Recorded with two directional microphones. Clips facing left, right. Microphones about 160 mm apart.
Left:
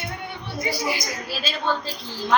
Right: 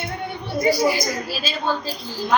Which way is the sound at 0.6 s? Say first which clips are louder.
Right 8 dB; 40° right (ahead or behind).